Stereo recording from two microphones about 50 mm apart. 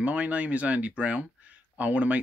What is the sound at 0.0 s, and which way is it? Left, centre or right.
Speech, right.